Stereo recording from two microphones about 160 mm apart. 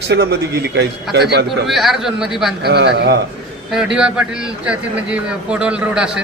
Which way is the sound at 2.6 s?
90° right.